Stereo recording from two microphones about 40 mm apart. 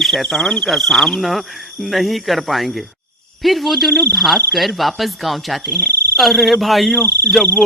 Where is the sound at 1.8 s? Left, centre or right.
Centre.